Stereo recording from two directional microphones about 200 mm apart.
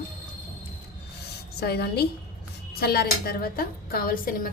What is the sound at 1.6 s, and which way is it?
A woman's voice, 55° left (ahead or behind).